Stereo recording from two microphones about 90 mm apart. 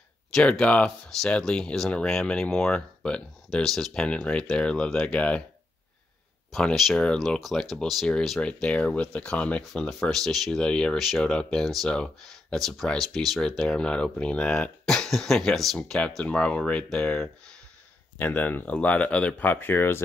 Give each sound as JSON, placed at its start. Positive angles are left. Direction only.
{"t": 0.3, "sound": "speech", "side_deg": 10}
{"t": 6.5, "sound": "speech", "side_deg": 0}
{"t": 8.4, "sound": "speech", "side_deg": 10}